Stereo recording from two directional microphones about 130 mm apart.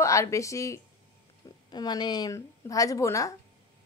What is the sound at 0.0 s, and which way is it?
Speech, 25° left (ahead or behind).